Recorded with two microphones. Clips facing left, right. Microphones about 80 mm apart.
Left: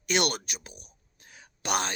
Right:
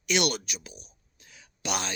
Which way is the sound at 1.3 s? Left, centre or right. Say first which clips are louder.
Left 2 dB; left.